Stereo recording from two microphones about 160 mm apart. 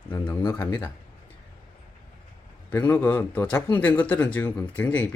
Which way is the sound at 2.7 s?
10° left (ahead or behind).